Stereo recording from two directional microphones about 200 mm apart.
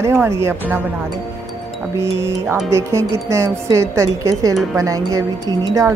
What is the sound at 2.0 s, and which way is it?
A woman's voice, 15° right (ahead or behind).